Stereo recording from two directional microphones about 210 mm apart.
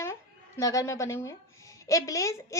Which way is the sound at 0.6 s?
15° left (ahead or behind).